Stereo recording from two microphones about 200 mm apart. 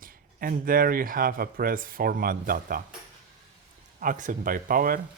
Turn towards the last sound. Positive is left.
turn(degrees=-45)  # may be behind; listen again after turning